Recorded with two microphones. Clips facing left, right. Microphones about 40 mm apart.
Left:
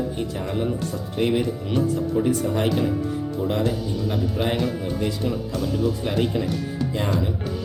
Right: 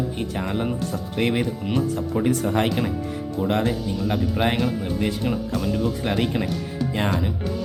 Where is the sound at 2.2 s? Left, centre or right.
Right.